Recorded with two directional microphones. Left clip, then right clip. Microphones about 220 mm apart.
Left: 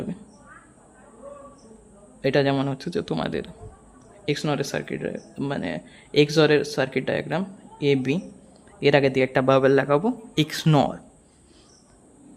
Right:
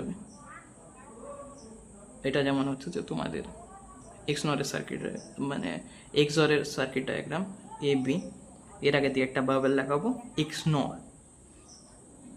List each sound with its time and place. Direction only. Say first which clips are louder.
2.2 s speech: left 7 dB; 35° left (ahead or behind)